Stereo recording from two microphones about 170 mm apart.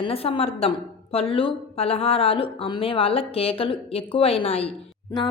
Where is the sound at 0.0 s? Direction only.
35° left (ahead or behind).